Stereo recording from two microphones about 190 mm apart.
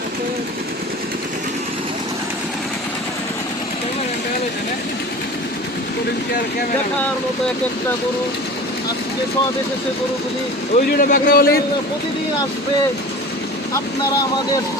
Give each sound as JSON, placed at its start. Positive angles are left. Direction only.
{"t": 10.8, "sound": "a man's voice", "side_deg": 50}